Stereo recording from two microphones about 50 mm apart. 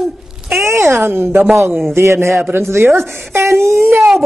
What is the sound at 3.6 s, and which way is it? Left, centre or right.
Speech, right.